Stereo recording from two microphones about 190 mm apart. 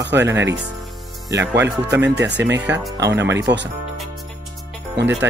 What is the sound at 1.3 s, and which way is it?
Speech, 15° right (ahead or behind).